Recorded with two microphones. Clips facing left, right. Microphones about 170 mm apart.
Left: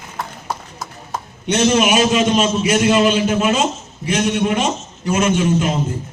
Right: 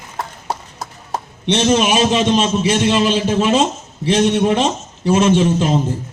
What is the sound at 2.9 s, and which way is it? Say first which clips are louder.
A man's voice: left 1 dB; 30° right (ahead or behind).